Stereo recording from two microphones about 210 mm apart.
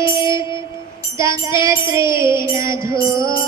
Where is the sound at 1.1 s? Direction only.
15° right (ahead or behind).